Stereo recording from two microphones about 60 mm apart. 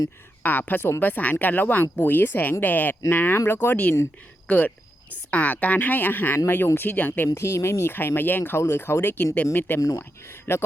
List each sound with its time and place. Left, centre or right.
0.4 s speech: left
4.4 s cricket: left
5.3 s speech: left
7.3 s speech: left
7.9 s speech: left